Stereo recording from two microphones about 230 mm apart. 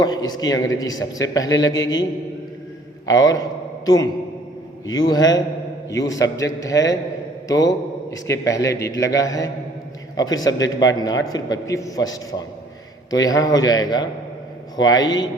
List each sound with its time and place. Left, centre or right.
0.0 s a man's voice: centre
3.1 s a man's voice: centre